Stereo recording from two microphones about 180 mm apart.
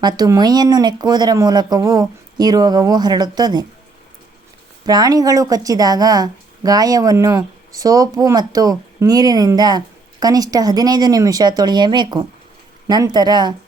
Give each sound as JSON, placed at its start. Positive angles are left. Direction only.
{"t": 0.0, "sound": "a woman's voice", "side_deg": -20}
{"t": 4.9, "sound": "a woman's voice", "side_deg": -20}